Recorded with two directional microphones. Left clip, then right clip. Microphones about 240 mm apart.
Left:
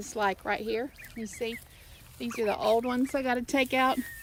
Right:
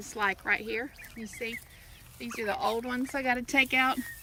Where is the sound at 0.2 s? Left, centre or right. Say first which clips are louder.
Even; centre.